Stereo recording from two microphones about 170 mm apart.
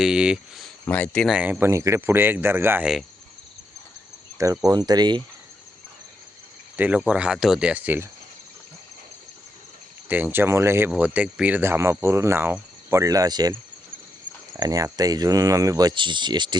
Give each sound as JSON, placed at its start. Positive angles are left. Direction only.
{"t": 0.0, "sound": "speech", "side_deg": -5}
{"t": 1.4, "sound": "speech", "side_deg": -10}
{"t": 4.6, "sound": "speech", "side_deg": -20}
{"t": 6.7, "sound": "speech", "side_deg": -10}
{"t": 10.1, "sound": "speech", "side_deg": -10}
{"t": 14.5, "sound": "speech", "side_deg": -20}